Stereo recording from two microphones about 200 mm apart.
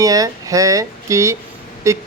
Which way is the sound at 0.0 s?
15° right (ahead or behind).